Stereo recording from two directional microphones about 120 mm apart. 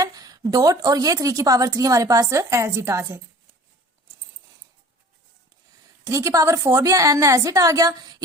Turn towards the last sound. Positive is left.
turn(degrees=-30)  # may be behind; listen again after turning